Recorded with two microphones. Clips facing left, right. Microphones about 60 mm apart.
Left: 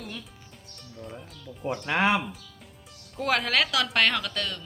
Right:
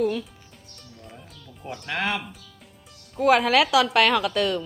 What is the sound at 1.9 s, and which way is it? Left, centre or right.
Speech, centre.